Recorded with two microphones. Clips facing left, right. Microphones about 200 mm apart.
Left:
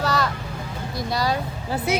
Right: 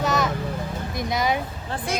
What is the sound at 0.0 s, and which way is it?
Vehicle, 20° right (ahead or behind).